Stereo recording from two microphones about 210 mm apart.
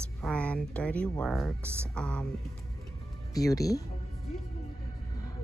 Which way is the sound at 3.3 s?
15° left (ahead or behind).